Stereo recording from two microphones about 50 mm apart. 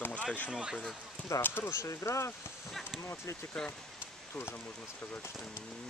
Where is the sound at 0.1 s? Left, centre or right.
Left.